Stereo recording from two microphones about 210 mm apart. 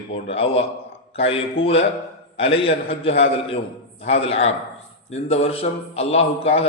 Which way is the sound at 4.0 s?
30° left (ahead or behind).